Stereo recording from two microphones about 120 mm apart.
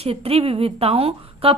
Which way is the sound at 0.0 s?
60° right (ahead or behind).